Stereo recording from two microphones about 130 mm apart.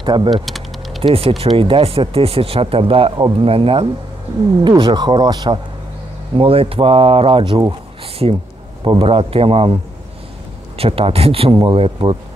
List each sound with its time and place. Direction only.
0.0 s speech: 35° right (ahead or behind)
0.5 s typing: centre (ahead or behind)
1.0 s speech: 45° right (ahead or behind)
6.3 s speech: 45° right (ahead or behind)
8.8 s speech: 45° right (ahead or behind)
10.8 s speech: 45° right (ahead or behind)